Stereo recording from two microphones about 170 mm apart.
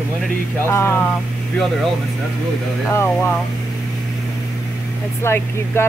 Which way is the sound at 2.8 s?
10° left (ahead or behind).